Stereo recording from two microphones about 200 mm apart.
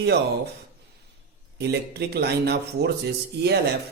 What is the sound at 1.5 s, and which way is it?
Speech, 55° right (ahead or behind).